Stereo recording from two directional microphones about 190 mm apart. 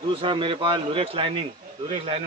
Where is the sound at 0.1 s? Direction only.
25° right (ahead or behind).